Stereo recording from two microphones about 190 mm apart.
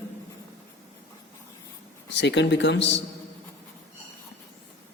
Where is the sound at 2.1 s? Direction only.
65° left (ahead or behind).